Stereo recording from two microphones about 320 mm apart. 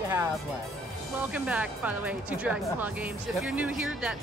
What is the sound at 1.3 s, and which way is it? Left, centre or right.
Speech, centre.